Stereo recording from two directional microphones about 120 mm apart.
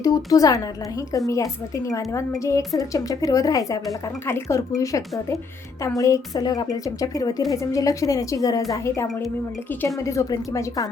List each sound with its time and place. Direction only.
0.0 s a woman's voice: 30° left (ahead or behind)